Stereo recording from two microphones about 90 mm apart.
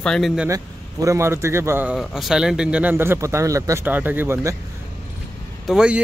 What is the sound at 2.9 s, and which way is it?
Speech, 30° right (ahead or behind).